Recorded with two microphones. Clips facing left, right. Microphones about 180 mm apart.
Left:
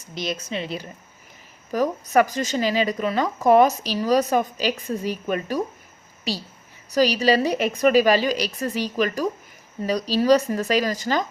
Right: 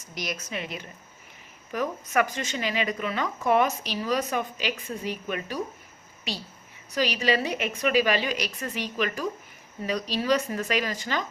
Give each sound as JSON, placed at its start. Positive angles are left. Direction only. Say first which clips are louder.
{"t": 0.1, "sound": "a woman's voice", "louder": "left 5 dB", "side_deg": 25}
{"t": 6.9, "sound": "speech", "louder": "left 7 dB", "side_deg": 40}